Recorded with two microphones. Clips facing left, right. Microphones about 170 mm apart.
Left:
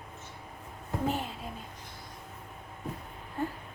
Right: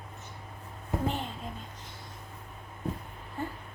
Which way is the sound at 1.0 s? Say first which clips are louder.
Left 2 dB; 5° left (ahead or behind).